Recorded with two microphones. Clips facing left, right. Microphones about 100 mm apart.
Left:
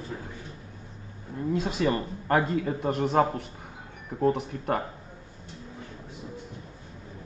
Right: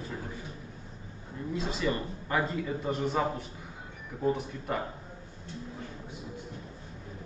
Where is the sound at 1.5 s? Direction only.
50° left (ahead or behind).